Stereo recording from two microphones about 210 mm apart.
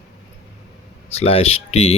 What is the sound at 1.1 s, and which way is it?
Speech, 30° left (ahead or behind).